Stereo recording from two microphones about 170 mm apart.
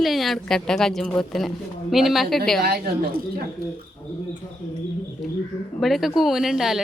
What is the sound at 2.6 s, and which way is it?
Speech, 65° right (ahead or behind).